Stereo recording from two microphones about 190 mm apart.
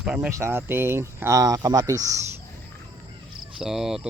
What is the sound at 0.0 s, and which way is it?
Speech, 5° right (ahead or behind).